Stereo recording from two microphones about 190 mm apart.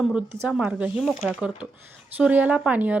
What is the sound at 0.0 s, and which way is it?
Speech, 5° right (ahead or behind).